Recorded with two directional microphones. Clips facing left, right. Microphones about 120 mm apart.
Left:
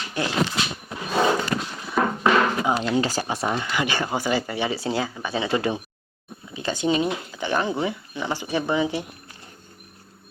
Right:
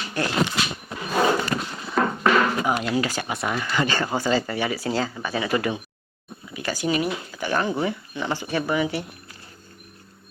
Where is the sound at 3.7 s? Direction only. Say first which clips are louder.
Right 1 dB; 15° left (ahead or behind).